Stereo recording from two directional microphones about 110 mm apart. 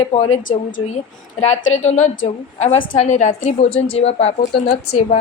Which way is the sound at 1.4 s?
90° left.